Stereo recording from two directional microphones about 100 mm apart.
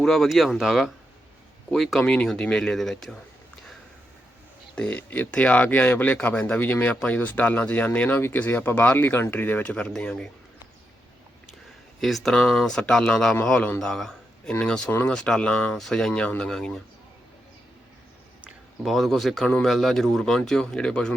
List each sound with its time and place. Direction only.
0.0 s speech: 5° left (ahead or behind)
4.7 s speech: 10° left (ahead or behind)
11.9 s speech: 5° left (ahead or behind)
18.9 s speech: centre (ahead or behind)